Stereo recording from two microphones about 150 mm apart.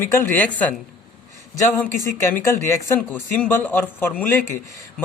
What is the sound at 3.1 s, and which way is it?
A man's voice, 10° left (ahead or behind).